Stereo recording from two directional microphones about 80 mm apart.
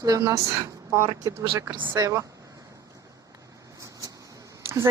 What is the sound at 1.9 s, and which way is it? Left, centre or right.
Speech, right.